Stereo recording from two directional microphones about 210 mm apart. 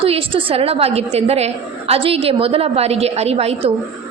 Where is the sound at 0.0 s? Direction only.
25° right (ahead or behind).